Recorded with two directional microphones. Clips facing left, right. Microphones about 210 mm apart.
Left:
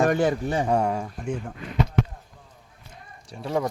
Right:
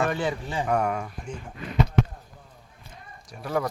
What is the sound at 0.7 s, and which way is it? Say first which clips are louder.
Speech: right 2 dB; 25° left (ahead or behind).